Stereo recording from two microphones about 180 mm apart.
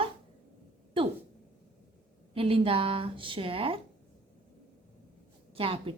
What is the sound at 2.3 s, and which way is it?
A woman's voice, 30° right (ahead or behind).